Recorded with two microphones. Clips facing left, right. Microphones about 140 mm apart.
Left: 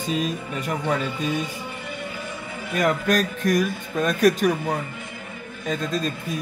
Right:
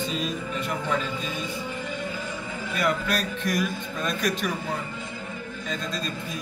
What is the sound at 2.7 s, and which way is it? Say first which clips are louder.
A man's voice: left 5 dB; 45° left (ahead or behind).